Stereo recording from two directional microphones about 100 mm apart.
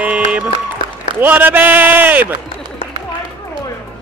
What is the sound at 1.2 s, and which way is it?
A man's voice, 20° right (ahead or behind).